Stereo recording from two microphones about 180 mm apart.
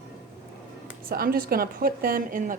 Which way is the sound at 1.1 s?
55° right (ahead or behind).